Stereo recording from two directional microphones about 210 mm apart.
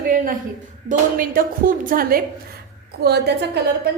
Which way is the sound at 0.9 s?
40° right (ahead or behind).